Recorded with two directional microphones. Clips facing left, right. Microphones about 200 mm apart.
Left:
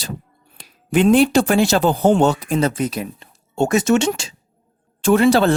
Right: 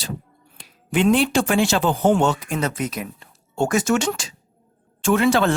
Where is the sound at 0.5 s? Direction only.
40° left (ahead or behind).